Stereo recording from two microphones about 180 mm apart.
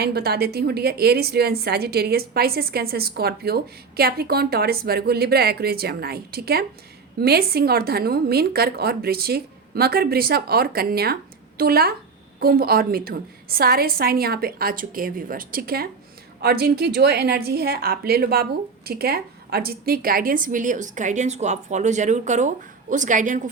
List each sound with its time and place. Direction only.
0.0 s a woman's voice: 60° right (ahead or behind); by 23.4 s 45° right (ahead or behind)